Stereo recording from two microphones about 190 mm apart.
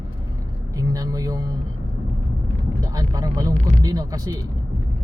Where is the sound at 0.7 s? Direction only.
20° right (ahead or behind).